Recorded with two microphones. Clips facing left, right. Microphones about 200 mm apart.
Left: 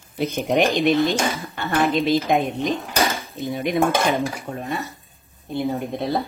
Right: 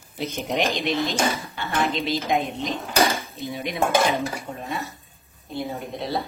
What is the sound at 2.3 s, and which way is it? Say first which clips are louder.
Speech: left 4 dB; 50° left (ahead or behind).